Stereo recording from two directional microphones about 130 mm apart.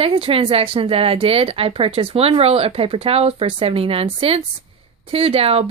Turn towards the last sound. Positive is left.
turn(degrees=-50)  # may be behind; listen again after turning